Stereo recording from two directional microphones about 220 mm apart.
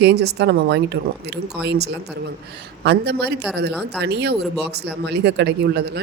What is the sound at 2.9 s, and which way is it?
Speech, 50° right (ahead or behind).